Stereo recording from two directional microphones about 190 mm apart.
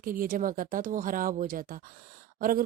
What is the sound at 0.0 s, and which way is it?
Speech, 50° right (ahead or behind).